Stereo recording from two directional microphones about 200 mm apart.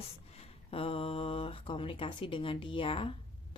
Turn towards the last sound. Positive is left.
turn(degrees=25)  # may be behind; listen again after turning